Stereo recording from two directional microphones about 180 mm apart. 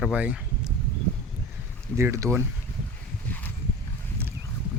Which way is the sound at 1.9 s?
15° right (ahead or behind).